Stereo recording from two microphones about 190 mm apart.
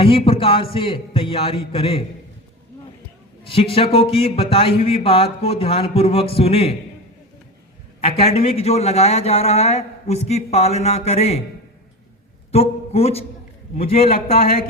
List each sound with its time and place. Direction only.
0.0 s a man's voice: 30° left (ahead or behind)
3.4 s a man's voice: 30° left (ahead or behind)
8.0 s speech: 30° left (ahead or behind)
12.5 s a man's voice: 30° left (ahead or behind)